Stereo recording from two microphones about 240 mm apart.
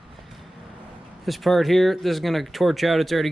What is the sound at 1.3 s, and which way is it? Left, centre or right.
Speech, centre.